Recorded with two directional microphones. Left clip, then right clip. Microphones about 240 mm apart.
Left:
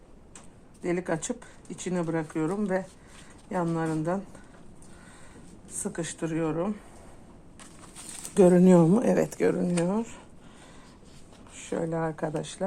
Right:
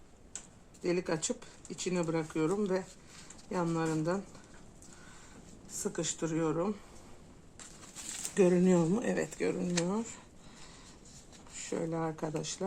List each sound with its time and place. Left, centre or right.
0.8 s speech: left
5.8 s speech: left
8.4 s speech: left
11.7 s speech: centre